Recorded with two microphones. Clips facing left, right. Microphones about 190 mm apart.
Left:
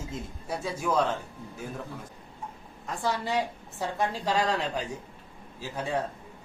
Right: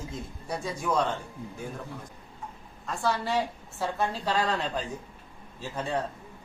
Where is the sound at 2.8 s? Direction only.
15° left (ahead or behind).